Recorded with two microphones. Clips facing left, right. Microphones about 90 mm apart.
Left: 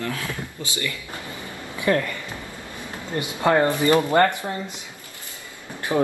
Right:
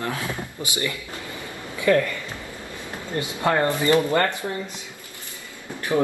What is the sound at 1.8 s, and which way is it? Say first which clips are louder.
Speech: right 2 dB; 25° left (ahead or behind).